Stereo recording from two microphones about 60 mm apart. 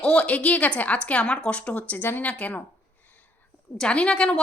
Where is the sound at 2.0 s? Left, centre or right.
Left.